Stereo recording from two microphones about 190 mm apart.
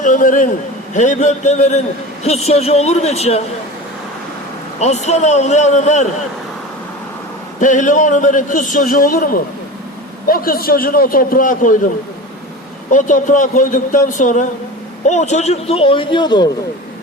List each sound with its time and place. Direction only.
0.0 s a man's voice: 45° left (ahead or behind)
4.8 s a man's voice: 35° left (ahead or behind)
7.6 s a man's voice: 40° left (ahead or behind)
12.9 s a man's voice: 40° left (ahead or behind); by 16.5 s 25° left (ahead or behind)